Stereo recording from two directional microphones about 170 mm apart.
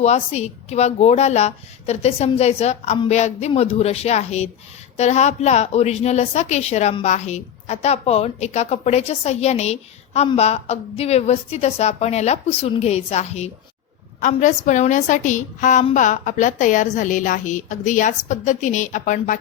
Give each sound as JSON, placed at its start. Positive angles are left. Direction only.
{"t": 0.0, "sound": "a woman's voice", "side_deg": 40}